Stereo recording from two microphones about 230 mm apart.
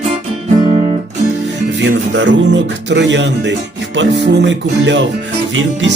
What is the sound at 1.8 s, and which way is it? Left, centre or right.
Music, right.